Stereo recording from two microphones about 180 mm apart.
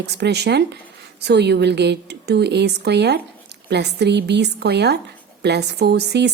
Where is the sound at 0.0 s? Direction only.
70° right (ahead or behind).